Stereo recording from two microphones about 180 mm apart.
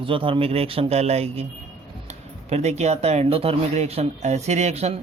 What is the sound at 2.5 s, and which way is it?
A man's voice, 40° right (ahead or behind).